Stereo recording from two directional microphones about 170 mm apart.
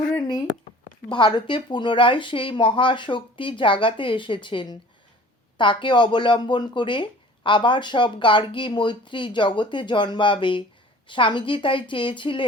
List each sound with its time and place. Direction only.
1.1 s speech: 30° left (ahead or behind)